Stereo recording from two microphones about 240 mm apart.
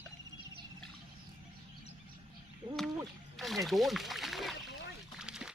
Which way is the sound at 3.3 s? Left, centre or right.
Centre.